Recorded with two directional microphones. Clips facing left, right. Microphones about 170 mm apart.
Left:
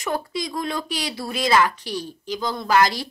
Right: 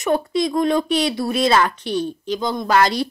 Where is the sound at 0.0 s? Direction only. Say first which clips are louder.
Right 8 dB; 25° right (ahead or behind).